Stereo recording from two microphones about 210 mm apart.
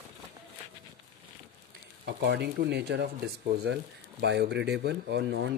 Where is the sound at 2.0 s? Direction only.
55° right (ahead or behind).